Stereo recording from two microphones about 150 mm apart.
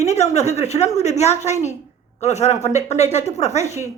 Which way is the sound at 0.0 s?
50° left (ahead or behind).